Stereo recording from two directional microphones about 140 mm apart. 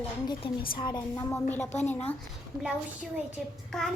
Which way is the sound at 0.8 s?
30° left (ahead or behind).